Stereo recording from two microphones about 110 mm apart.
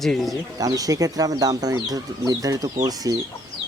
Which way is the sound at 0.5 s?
35° right (ahead or behind).